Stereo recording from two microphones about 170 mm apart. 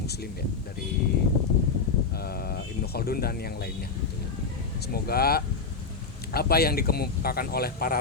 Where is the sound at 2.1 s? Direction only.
65° left (ahead or behind).